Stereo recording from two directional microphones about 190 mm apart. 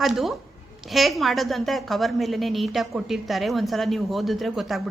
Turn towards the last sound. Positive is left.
turn(degrees=0)  # may be behind; listen again after turning